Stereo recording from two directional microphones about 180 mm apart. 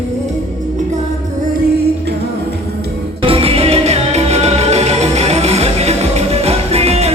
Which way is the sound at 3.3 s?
30° right (ahead or behind).